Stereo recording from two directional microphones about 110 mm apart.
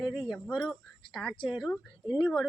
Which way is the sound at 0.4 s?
Centre (ahead or behind).